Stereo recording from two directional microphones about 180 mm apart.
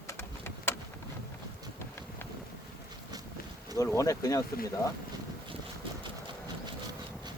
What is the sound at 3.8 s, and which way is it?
Speech, 15° left (ahead or behind).